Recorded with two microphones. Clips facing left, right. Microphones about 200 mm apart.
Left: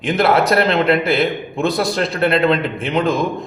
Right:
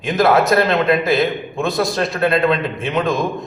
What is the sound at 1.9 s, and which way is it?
A man's voice, 30° left (ahead or behind).